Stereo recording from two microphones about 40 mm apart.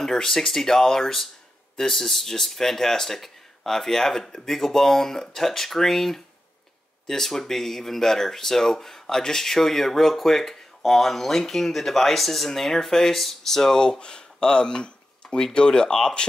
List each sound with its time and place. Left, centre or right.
0.0 s speech: centre